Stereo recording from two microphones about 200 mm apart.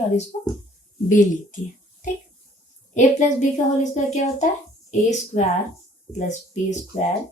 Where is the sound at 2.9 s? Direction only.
35° left (ahead or behind).